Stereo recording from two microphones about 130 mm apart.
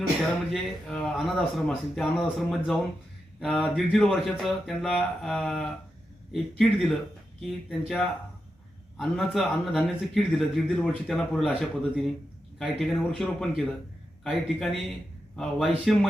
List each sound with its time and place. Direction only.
0.5 s speech: centre (ahead or behind)